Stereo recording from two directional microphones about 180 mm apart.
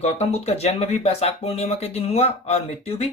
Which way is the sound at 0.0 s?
35° left (ahead or behind).